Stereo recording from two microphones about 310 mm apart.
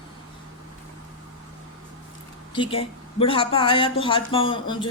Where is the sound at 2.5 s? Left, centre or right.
Centre.